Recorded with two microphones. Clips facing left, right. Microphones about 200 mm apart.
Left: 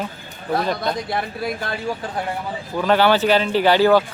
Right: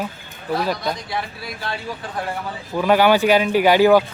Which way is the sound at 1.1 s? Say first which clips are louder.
Left 4 dB; 50° left (ahead or behind).